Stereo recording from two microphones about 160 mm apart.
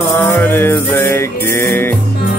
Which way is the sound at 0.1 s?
15° left (ahead or behind).